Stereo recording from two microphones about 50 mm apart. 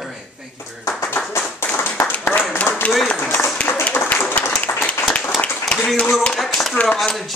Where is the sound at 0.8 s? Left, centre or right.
Left.